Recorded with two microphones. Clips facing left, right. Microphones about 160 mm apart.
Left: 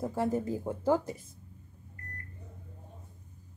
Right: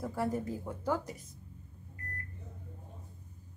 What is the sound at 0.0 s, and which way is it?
Speech, 25° left (ahead or behind).